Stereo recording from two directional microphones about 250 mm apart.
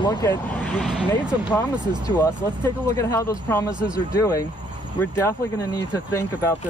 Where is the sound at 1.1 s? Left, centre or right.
Centre.